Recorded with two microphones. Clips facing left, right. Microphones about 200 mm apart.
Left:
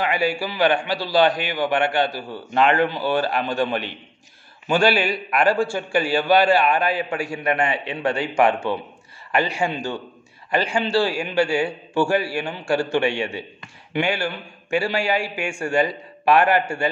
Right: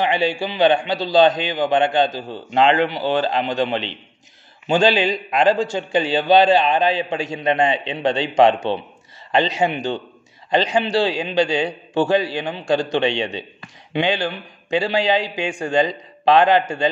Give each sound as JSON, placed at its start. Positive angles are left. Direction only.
{"t": 0.0, "sound": "a man's voice", "side_deg": -25}